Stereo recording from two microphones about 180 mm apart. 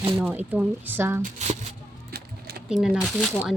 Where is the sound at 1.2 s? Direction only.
40° right (ahead or behind).